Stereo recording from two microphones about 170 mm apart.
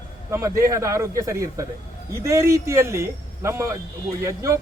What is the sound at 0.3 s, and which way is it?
A man's voice, 15° right (ahead or behind).